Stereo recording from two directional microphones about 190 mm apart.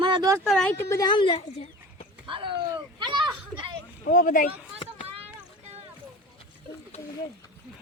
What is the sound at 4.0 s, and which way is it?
Speech, 45° left (ahead or behind).